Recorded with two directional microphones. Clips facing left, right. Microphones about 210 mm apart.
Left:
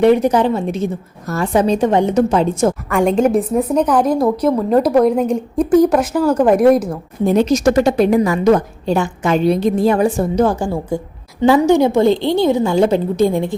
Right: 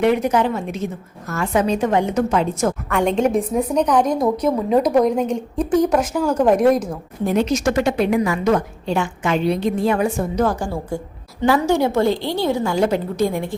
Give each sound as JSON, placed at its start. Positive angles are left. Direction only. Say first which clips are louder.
{"t": 0.0, "sound": "a woman's voice", "louder": "left 5 dB", "side_deg": 35}
{"t": 3.2, "sound": "a woman's voice", "louder": "left 4 dB", "side_deg": 5}
{"t": 7.3, "sound": "a woman's voice", "louder": "left 5 dB", "side_deg": 35}